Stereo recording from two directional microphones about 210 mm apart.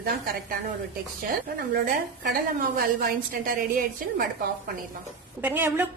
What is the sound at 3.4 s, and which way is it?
Speech, 40° right (ahead or behind).